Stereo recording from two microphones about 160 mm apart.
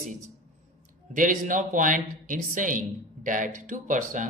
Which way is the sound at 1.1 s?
55° right (ahead or behind).